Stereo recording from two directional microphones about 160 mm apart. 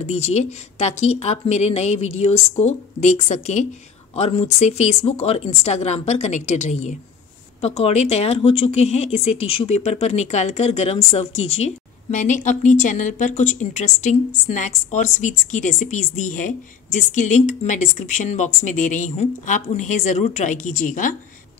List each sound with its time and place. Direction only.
0.0 s speech: 45° left (ahead or behind)